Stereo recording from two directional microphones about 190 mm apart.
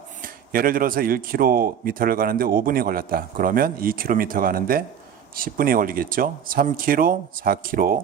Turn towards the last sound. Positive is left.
turn(degrees=-50)  # may be behind; listen again after turning